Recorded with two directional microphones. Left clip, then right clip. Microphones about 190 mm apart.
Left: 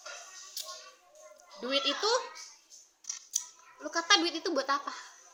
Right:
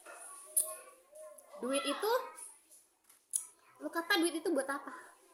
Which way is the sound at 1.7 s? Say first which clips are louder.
Left 5 dB; 25° right (ahead or behind).